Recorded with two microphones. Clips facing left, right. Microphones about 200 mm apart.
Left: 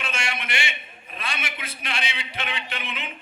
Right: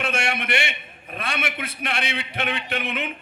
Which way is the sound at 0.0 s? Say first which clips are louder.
Right 6 dB; 60° right (ahead or behind).